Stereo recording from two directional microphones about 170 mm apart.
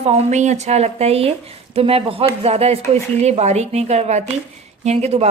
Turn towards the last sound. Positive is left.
turn(degrees=-40)  # may be behind; listen again after turning